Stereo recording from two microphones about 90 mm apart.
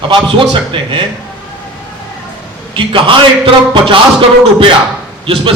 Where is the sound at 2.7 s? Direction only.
70° right (ahead or behind).